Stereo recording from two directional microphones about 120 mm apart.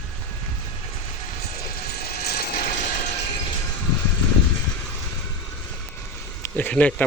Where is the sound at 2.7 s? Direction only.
90° left.